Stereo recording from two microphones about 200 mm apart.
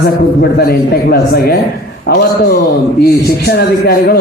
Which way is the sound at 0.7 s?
50° left (ahead or behind).